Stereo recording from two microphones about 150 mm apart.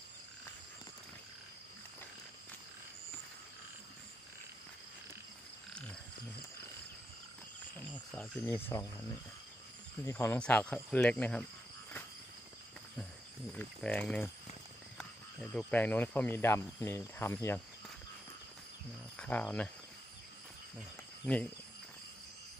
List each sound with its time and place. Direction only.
7.8 s cricket: 10° left (ahead or behind)
8.5 s speech: 15° left (ahead or behind)
10.1 s speech: 10° left (ahead or behind)
13.5 s speech: 10° left (ahead or behind)
15.4 s speech: 10° left (ahead or behind)
19.1 s speech: 10° left (ahead or behind)
21.3 s speech: 10° left (ahead or behind)